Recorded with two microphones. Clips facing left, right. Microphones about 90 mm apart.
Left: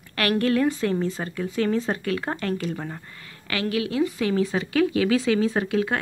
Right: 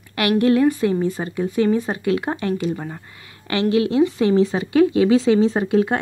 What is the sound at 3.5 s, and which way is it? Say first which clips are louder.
Speech: right 7 dB; 25° right (ahead or behind).